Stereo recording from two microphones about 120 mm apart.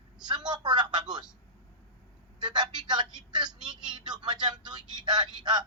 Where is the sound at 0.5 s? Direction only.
40° right (ahead or behind).